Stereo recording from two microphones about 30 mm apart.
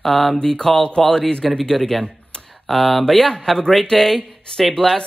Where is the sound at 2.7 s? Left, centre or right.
Centre.